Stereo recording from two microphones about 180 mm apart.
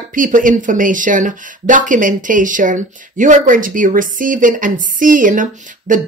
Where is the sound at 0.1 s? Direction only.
45° right (ahead or behind).